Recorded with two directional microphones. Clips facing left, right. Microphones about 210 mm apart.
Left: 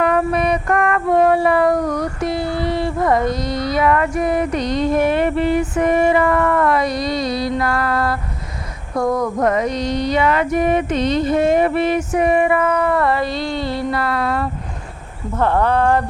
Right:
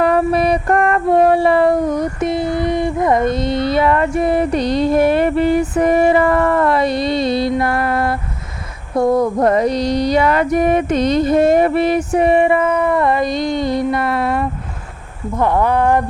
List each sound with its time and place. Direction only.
0.0 s female singing: 30° right (ahead or behind)
7.6 s mantra: 25° right (ahead or behind)
9.0 s a sound: 30° right (ahead or behind)
15.4 s speech: 15° right (ahead or behind)